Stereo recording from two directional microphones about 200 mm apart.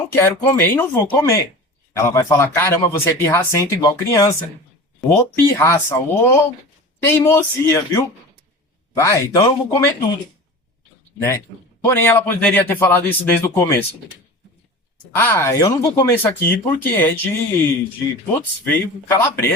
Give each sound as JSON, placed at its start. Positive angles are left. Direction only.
{"t": 0.2, "sound": "speech", "side_deg": 10}
{"t": 11.9, "sound": "speech", "side_deg": 10}
{"t": 15.1, "sound": "speech", "side_deg": 10}